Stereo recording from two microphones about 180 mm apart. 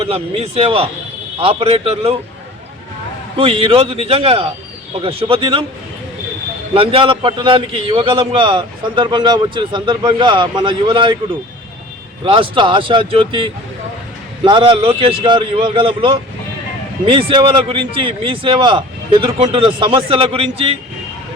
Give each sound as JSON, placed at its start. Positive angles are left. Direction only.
{"t": 0.0, "sound": "a man's voice", "side_deg": -35}
{"t": 3.3, "sound": "a man's voice", "side_deg": -30}
{"t": 6.7, "sound": "a man's voice", "side_deg": -30}
{"t": 12.2, "sound": "a man's voice", "side_deg": -30}